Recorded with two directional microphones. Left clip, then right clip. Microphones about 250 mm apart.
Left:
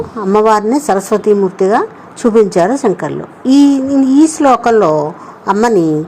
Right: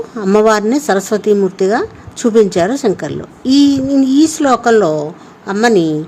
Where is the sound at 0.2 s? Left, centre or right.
Centre.